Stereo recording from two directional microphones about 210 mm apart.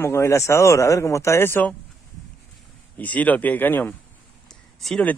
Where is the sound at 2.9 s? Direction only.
5° left (ahead or behind).